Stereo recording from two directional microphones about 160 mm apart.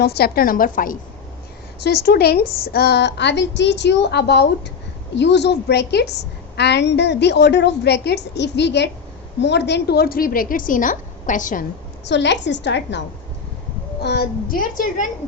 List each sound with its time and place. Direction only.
0.0 s a woman's voice: 80° left; by 0.9 s 60° left (ahead or behind)
1.8 s a woman's voice: 80° left; by 11.6 s 55° left (ahead or behind)
12.0 s a woman's voice: 90° left; by 15.0 s 60° left (ahead or behind)